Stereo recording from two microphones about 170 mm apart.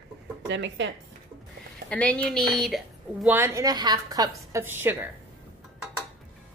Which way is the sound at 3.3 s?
15° right (ahead or behind).